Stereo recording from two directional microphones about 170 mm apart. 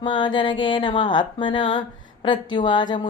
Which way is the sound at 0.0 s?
30° left (ahead or behind).